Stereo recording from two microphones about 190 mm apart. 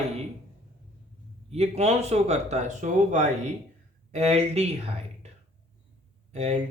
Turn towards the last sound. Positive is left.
turn(degrees=-35)  # may be behind; listen again after turning